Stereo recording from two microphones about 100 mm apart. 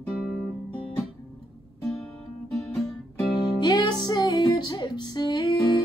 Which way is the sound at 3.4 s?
45° left (ahead or behind).